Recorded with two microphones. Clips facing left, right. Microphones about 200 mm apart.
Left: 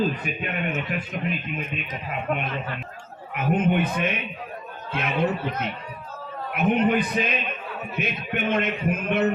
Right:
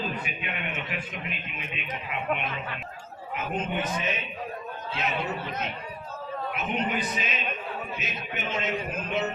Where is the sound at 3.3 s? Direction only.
60° left (ahead or behind).